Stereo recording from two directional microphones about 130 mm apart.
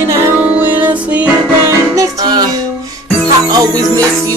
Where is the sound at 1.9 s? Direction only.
30° right (ahead or behind).